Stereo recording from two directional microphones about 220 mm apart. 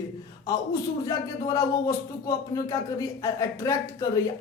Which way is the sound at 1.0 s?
15° left (ahead or behind).